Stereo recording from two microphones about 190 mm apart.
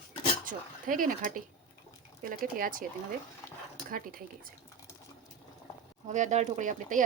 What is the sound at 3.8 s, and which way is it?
Speech, 50° right (ahead or behind).